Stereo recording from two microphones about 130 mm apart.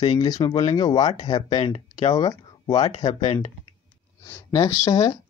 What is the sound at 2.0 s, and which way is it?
Speech, 30° left (ahead or behind).